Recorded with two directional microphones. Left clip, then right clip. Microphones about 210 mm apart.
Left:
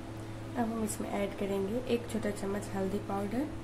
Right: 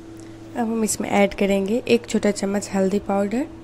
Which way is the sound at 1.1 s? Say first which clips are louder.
Right 17 dB; 45° right (ahead or behind).